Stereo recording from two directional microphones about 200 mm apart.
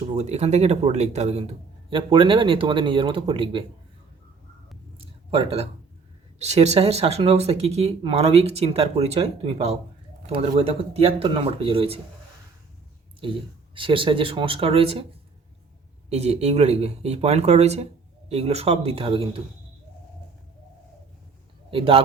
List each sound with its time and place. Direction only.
0.1 s a man's voice: 35° right (ahead or behind)
5.3 s a man's voice: 30° right (ahead or behind)
13.7 s a man's voice: 25° right (ahead or behind)
16.0 s a man's voice: 30° right (ahead or behind)
21.7 s a man's voice: 25° right (ahead or behind)